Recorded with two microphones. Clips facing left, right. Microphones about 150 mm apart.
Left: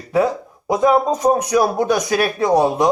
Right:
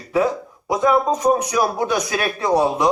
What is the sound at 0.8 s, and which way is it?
Speech, 40° left (ahead or behind).